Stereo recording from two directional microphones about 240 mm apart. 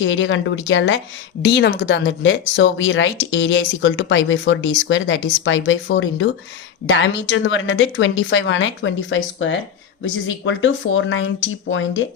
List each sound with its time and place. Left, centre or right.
0.0 s speech: left